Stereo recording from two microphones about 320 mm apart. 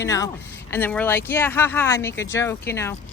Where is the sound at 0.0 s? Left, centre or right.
Centre.